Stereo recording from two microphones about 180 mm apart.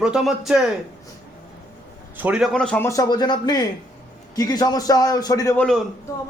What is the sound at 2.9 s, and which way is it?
Speech, 20° left (ahead or behind).